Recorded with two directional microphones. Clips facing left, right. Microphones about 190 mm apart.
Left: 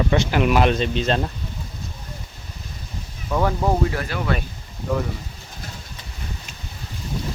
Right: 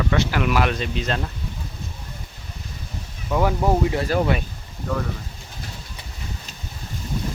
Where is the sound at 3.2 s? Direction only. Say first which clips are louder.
Right 1 dB; 5° right (ahead or behind).